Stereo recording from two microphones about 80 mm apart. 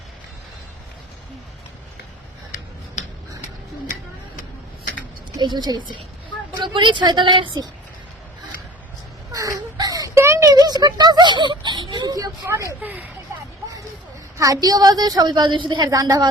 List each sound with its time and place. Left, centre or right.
5.4 s a woman's voice: right
6.6 s a woman's voice: right
9.3 s a sound: right
10.2 s a child's voice: right
12.8 s speech: right
14.3 s a woman's voice: right
15.9 s a woman's voice: right